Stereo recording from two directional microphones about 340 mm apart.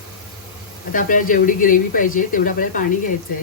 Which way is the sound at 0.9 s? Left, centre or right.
Left.